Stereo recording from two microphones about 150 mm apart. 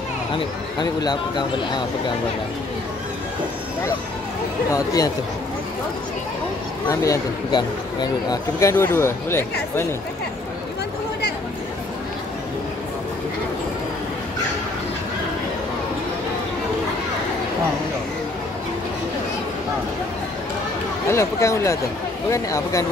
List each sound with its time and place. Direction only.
0.7 s speech: 30° left (ahead or behind)
4.7 s speech: 25° left (ahead or behind)
6.9 s speech: 25° left (ahead or behind)
21.1 s speech: 20° left (ahead or behind)